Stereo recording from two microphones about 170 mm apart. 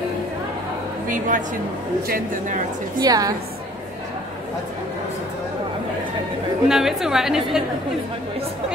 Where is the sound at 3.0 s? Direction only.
20° right (ahead or behind).